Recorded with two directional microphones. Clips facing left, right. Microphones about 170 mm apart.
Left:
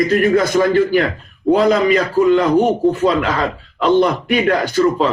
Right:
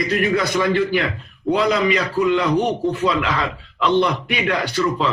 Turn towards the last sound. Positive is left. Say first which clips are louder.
# left 6 dB
turn(degrees=45)  # may be behind; listen again after turning